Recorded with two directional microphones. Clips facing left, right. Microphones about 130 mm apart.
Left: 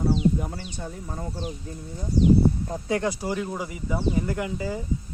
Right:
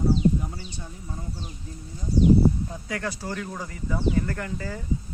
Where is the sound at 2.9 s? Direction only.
20° left (ahead or behind).